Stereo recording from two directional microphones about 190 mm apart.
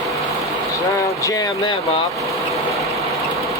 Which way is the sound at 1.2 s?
20° left (ahead or behind).